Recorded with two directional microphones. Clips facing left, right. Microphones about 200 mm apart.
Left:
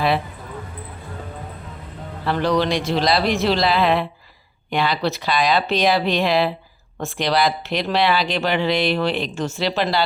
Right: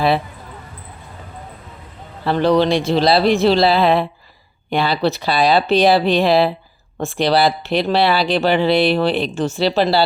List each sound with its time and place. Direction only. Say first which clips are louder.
2.2 s a man's voice: right 5 dB; 30° right (ahead or behind)